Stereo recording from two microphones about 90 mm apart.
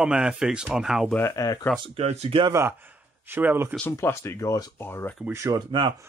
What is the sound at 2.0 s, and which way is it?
Speech, 90° right.